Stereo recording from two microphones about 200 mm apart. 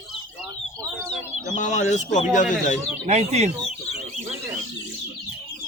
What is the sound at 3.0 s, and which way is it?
Speech, 35° right (ahead or behind).